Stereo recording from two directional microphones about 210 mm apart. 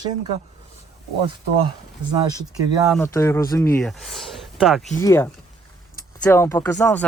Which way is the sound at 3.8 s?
Centre (ahead or behind).